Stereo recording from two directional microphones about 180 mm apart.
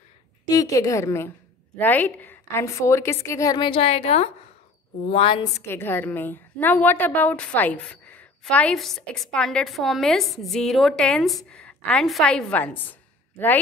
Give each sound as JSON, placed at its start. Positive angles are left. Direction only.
{"t": 0.5, "sound": "a woman's voice", "side_deg": 20}
{"t": 5.7, "sound": "a woman's voice", "side_deg": 10}